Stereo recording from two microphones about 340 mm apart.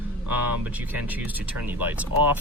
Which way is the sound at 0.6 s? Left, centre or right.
Centre.